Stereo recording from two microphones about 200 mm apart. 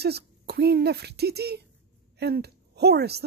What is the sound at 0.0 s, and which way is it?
A woman's voice, 55° right (ahead or behind).